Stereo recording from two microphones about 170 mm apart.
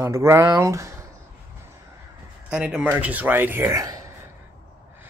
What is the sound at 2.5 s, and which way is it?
Speech, 5° right (ahead or behind).